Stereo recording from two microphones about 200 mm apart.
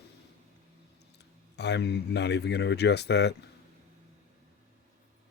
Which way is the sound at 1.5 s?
60° left (ahead or behind).